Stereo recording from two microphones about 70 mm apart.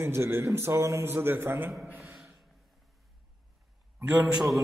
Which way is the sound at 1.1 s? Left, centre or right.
Right.